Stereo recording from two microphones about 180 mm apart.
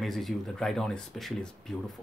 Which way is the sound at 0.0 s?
Centre (ahead or behind).